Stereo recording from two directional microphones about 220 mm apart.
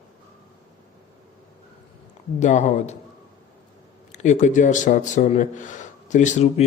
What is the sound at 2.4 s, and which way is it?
Speech, 35° left (ahead or behind).